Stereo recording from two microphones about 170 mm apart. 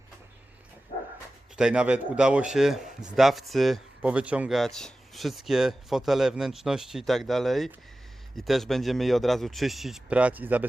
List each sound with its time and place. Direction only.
0.9 s dog: 35° left (ahead or behind)
1.5 s a man's voice: 5° right (ahead or behind)